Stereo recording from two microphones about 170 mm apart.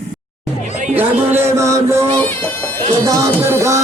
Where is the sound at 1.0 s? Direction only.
15° right (ahead or behind).